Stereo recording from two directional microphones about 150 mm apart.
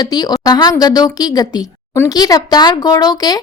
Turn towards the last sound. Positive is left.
turn(degrees=25)  # may be behind; listen again after turning